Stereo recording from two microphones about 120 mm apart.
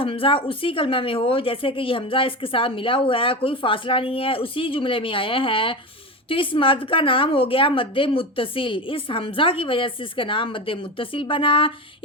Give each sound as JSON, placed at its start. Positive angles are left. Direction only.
{"t": 0.0, "sound": "speech", "side_deg": 50}